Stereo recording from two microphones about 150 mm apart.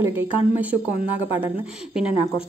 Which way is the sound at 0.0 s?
15° right (ahead or behind).